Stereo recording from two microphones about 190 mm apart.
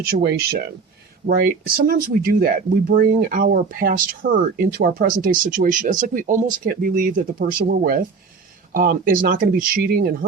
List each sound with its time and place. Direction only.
0.0 s speech: 55° right (ahead or behind)